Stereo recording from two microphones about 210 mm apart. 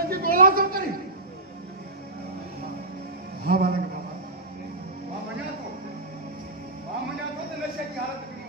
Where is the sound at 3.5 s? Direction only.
45° right (ahead or behind).